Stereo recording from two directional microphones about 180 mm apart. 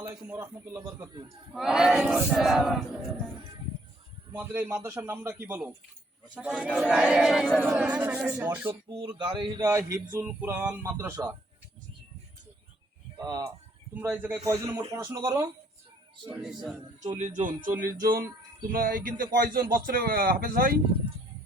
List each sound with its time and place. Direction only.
0.3 s speech: 15° right (ahead or behind)
1.5 s crowd: 5° right (ahead or behind)
4.3 s speech: 15° right (ahead or behind)
6.3 s crowd: 5° right (ahead or behind)
6.8 s speech: 5° right (ahead or behind)
8.9 s speech: 25° right (ahead or behind)
9.6 s speech: 15° right (ahead or behind)
13.1 s speech: 20° right (ahead or behind)
13.9 s speech: 10° right (ahead or behind)
17.2 s speech: 45° right (ahead or behind)
17.7 s speech: 55° right (ahead or behind)